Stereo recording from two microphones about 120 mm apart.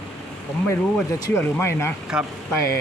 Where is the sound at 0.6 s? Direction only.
20° left (ahead or behind).